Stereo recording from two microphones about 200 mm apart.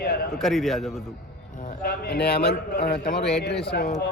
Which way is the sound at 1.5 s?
45° left (ahead or behind).